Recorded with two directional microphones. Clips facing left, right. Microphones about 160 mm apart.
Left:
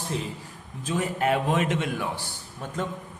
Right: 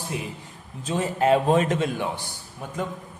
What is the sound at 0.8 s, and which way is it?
A man's voice, 30° right (ahead or behind).